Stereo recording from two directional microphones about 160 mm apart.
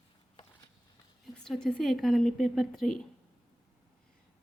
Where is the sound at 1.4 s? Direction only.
5° left (ahead or behind).